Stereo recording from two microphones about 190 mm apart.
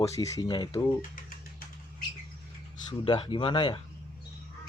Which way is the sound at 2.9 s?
25° left (ahead or behind).